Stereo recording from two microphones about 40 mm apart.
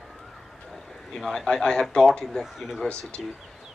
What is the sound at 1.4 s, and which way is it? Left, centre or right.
Speech, left.